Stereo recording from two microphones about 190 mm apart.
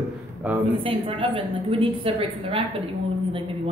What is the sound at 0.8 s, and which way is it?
A woman's voice, 25° right (ahead or behind).